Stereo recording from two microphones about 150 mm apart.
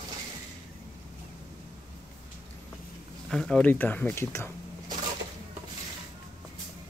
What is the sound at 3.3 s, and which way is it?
Speech, 5° left (ahead or behind).